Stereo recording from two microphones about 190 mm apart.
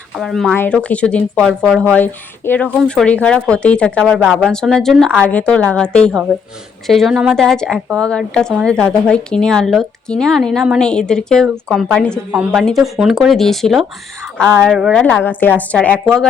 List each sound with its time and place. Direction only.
0.2 s a woman's voice: centre (ahead or behind)
12.3 s a woman's voice: 5° right (ahead or behind)
15.0 s a woman's voice: 10° left (ahead or behind)